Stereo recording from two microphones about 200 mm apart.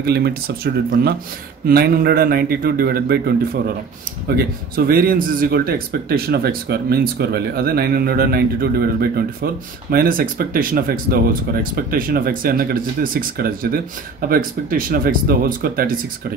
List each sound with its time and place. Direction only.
0.0 s speech: 55° right (ahead or behind)
1.7 s speech: 50° right (ahead or behind)
4.7 s speech: 50° right (ahead or behind)